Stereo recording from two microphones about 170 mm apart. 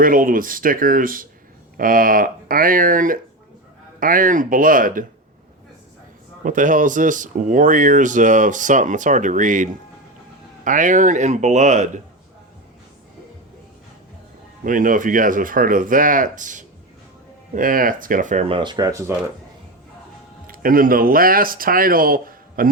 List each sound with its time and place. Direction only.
0.0 s speech: 55° right (ahead or behind)
6.4 s speech: 50° right (ahead or behind)
14.6 s speech: 50° right (ahead or behind)
18.4 s speech: 30° right (ahead or behind)
20.5 s speech: 55° right (ahead or behind)